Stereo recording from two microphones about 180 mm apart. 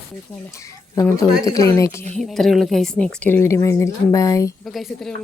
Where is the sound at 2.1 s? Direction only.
Centre (ahead or behind); by 4.5 s 20° left (ahead or behind).